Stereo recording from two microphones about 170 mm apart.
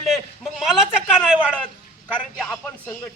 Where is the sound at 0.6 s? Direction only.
5° right (ahead or behind).